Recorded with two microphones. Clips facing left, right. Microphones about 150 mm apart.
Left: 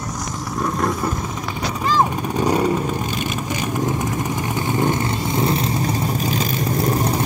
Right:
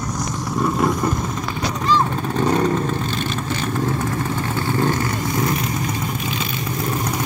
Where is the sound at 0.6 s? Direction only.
Centre (ahead or behind).